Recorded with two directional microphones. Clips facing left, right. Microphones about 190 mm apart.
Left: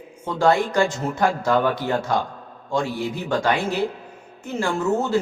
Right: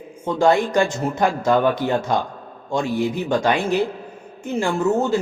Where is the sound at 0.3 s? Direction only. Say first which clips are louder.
Right 2 dB; 20° right (ahead or behind).